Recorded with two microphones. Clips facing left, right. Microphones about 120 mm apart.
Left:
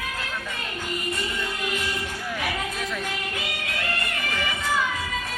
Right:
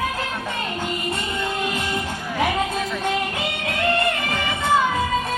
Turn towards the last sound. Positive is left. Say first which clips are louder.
# right 6 dB
turn(degrees=-25)  # may be behind; listen again after turning